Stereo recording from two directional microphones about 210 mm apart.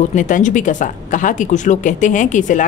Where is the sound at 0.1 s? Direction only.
35° left (ahead or behind).